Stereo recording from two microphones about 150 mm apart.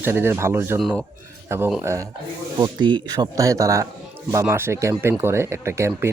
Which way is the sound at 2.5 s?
30° right (ahead or behind).